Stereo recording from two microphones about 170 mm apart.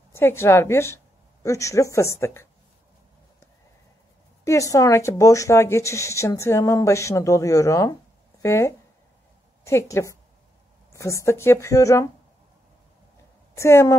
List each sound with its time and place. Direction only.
0.1 s a woman's voice: 15° left (ahead or behind)
4.5 s speech: 20° left (ahead or behind)
13.6 s speech: 15° left (ahead or behind)